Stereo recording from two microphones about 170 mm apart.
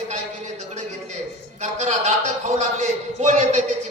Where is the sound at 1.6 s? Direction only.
45° right (ahead or behind).